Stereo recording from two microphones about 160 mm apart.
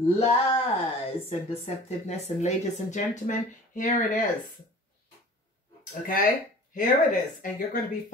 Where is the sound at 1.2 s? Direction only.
40° left (ahead or behind).